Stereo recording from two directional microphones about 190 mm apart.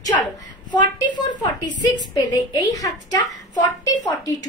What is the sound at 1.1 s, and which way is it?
Speech, 25° left (ahead or behind).